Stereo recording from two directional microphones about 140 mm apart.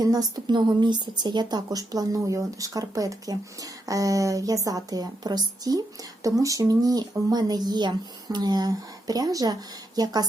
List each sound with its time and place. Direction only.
0.0 s a woman's voice: 25° right (ahead or behind)